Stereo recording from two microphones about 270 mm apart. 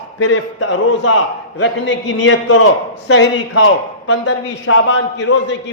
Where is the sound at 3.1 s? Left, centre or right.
Left.